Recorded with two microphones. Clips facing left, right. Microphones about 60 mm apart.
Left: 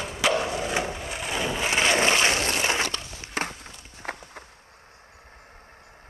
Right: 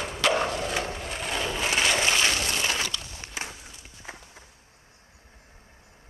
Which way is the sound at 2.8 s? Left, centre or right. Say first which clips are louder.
Left 3 dB; left.